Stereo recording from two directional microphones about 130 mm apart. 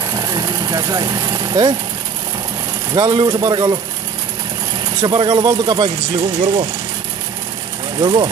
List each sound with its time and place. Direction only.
0.1 s vehicle: 30° right (ahead or behind)
2.9 s speech: 30° right (ahead or behind)
5.0 s speech: 35° right (ahead or behind)
6.4 s speech: 50° right (ahead or behind)
8.0 s speech: 30° right (ahead or behind)